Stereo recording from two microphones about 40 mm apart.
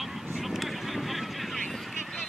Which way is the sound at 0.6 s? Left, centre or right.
Centre.